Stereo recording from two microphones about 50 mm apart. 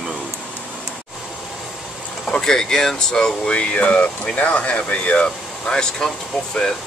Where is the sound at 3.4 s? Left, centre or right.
Left.